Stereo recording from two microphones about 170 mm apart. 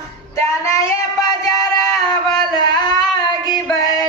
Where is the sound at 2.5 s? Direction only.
25° left (ahead or behind).